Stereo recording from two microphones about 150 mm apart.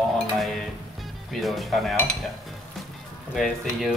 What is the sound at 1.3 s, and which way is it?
Speech, centre (ahead or behind).